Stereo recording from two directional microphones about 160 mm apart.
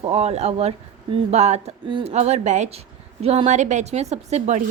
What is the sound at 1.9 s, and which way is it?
Speech, 30° right (ahead or behind).